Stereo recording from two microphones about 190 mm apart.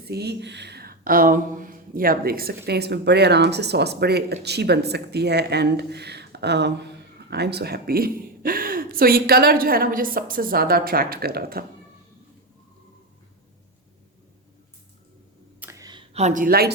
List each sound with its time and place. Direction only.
0.0 s speech: 60° right (ahead or behind)
15.6 s a sound: 20° right (ahead or behind)
16.1 s speech: 40° right (ahead or behind)